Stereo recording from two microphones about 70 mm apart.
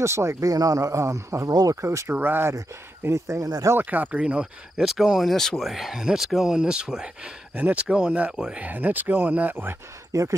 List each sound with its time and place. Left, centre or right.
0.0 s speech: right
0.5 s speech: right
1.5 s speech: right
1.8 s speech: right
3.1 s speech: right
3.7 s speech: right
4.2 s speech: centre
7.5 s speech: right
10.1 s speech: right